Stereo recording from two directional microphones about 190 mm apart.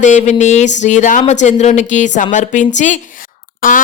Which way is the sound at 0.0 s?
40° left (ahead or behind).